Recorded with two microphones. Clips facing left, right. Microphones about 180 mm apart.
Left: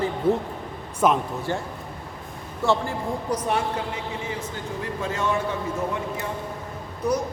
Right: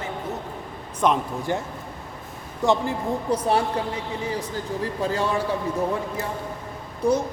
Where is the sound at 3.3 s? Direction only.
35° right (ahead or behind).